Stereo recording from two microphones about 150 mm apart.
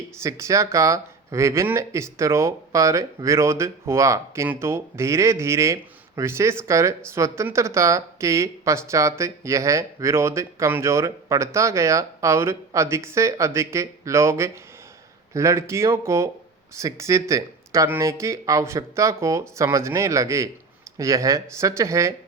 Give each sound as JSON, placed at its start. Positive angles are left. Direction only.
{"t": 0.2, "sound": "speech", "side_deg": -20}